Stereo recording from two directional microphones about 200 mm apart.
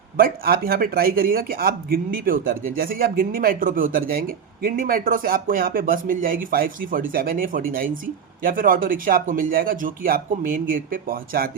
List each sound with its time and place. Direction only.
0.2 s speech: 50° right (ahead or behind)